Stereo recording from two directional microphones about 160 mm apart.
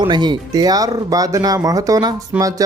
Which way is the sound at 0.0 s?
30° right (ahead or behind).